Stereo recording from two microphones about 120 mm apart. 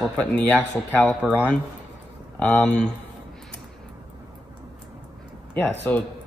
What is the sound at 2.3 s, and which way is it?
Speech, 15° left (ahead or behind).